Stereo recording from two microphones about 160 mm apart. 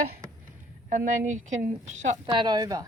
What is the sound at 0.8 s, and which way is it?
A woman's voice, 55° right (ahead or behind).